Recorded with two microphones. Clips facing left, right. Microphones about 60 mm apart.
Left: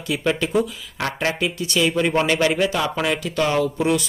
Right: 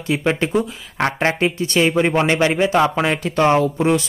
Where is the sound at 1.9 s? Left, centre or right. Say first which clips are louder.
Right 3 dB; right.